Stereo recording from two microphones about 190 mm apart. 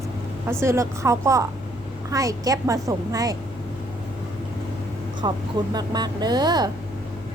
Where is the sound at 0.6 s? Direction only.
15° right (ahead or behind).